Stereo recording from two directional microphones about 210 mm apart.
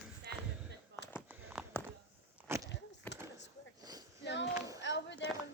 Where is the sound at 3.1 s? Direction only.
10° left (ahead or behind).